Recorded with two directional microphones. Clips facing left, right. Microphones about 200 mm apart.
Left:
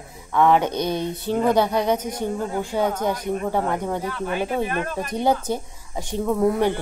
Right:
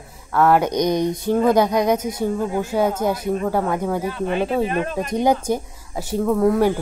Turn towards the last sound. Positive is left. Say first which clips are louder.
# right 3 dB
turn(degrees=0)  # may be behind; listen again after turning